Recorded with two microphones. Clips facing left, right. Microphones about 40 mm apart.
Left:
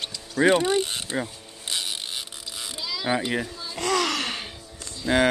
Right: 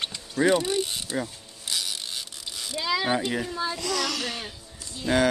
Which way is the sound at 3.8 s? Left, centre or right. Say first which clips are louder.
Left 4 dB; left.